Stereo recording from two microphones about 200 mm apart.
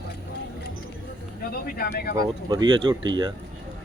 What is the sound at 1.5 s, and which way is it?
Speech, 50° left (ahead or behind).